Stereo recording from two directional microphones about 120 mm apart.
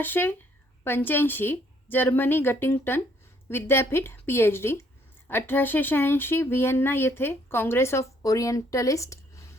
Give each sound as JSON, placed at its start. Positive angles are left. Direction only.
{"t": 0.0, "sound": "a woman's voice", "side_deg": 15}